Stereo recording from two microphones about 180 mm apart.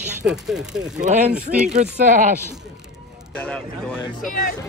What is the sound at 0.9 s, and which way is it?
Speech, 40° right (ahead or behind).